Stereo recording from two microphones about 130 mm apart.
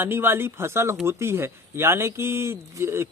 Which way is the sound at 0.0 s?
20° right (ahead or behind).